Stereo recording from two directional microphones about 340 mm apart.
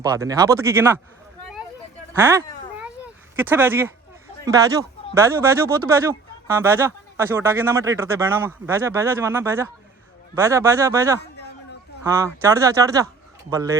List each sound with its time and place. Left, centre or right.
0.0 s speech: centre
2.1 s a sound: centre
4.4 s speech: centre